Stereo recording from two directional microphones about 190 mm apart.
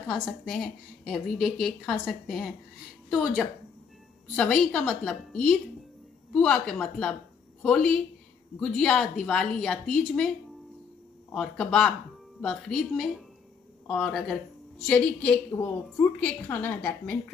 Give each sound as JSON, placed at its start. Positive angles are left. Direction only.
{"t": 0.1, "sound": "a woman's voice", "side_deg": 0}
{"t": 11.3, "sound": "a woman's voice", "side_deg": 5}
{"t": 15.5, "sound": "a woman's voice", "side_deg": 20}
{"t": 16.0, "sound": "a woman's voice", "side_deg": 10}